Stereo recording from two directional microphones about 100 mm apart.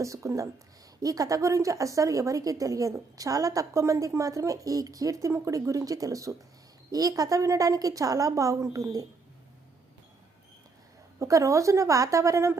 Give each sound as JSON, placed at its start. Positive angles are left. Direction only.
{"t": 0.0, "sound": "speech", "side_deg": -30}
{"t": 11.2, "sound": "speech", "side_deg": -30}